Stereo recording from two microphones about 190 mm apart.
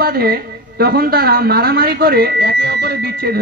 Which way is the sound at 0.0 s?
55° right (ahead or behind).